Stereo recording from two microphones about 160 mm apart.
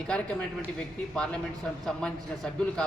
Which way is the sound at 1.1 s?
5° left (ahead or behind).